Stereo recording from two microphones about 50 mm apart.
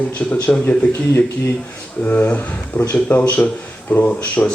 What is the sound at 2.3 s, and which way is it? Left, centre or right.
Speech, left.